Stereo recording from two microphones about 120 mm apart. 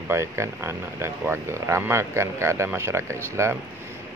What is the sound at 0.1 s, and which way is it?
Speech, 20° right (ahead or behind).